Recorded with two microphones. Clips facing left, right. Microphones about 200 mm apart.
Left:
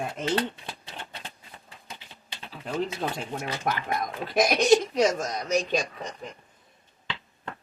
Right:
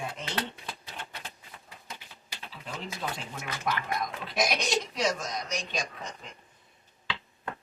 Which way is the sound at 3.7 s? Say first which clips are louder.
Left 1 dB; 50° left (ahead or behind).